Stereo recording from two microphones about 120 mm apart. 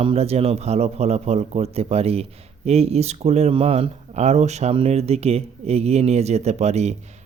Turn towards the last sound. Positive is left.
turn(degrees=-65)  # may be behind; listen again after turning